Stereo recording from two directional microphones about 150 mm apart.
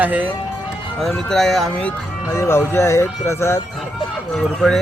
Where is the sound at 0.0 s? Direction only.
10° right (ahead or behind).